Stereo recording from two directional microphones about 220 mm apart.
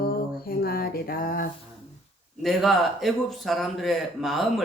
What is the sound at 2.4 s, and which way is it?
Speech, centre (ahead or behind).